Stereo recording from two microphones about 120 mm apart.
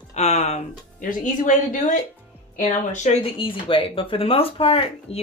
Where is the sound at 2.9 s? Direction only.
90° left.